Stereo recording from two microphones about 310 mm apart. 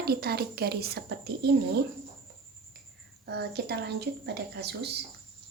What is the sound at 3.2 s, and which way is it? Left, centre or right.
Speech, right.